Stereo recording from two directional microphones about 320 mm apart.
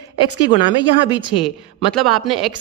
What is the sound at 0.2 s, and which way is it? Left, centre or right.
Speech, centre.